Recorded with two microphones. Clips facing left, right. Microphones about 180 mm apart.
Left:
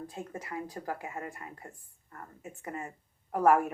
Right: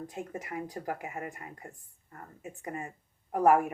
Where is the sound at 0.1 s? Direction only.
20° right (ahead or behind).